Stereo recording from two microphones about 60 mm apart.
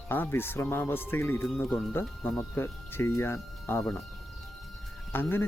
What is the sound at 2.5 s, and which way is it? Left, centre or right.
Speech, left.